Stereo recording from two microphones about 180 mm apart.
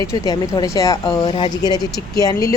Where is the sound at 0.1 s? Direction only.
20° left (ahead or behind).